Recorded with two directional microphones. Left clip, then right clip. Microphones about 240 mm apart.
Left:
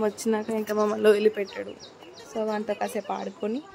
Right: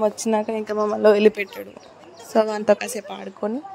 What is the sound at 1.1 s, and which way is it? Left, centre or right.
A woman's voice, right.